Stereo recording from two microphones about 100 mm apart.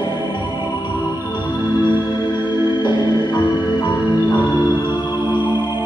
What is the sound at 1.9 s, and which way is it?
Music, 50° left (ahead or behind).